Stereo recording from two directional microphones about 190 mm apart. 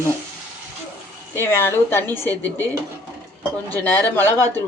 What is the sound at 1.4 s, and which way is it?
Speech, 15° left (ahead or behind).